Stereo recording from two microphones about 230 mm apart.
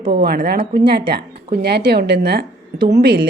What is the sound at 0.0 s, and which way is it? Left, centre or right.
Speech, right.